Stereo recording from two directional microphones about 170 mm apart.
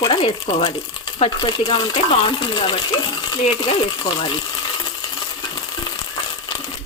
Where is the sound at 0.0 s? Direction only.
30° left (ahead or behind).